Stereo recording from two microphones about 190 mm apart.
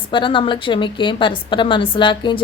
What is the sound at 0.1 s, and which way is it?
A woman's voice, 25° left (ahead or behind).